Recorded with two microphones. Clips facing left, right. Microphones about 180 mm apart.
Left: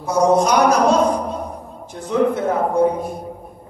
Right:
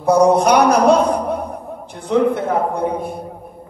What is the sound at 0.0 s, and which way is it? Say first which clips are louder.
A man's voice: right 3 dB; 60° right (ahead or behind).